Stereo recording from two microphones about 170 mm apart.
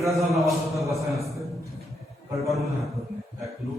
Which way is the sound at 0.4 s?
Centre (ahead or behind).